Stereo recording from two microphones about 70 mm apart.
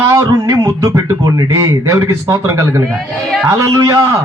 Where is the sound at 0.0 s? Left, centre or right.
Right.